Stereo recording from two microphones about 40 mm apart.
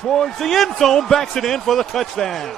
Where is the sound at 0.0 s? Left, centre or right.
Centre.